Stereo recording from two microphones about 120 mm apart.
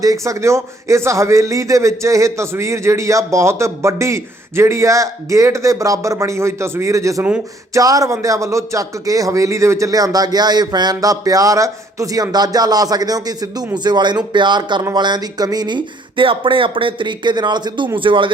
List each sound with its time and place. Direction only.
0.0 s a man's voice: 30° right (ahead or behind); by 18.3 s 45° right (ahead or behind)